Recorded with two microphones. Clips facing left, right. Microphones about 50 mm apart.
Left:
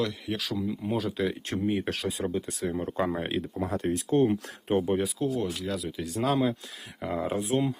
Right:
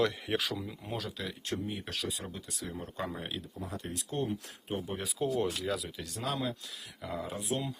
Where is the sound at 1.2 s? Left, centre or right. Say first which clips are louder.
Left 8 dB; left.